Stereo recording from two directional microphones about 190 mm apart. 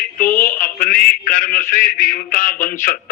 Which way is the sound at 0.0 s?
50° left (ahead or behind).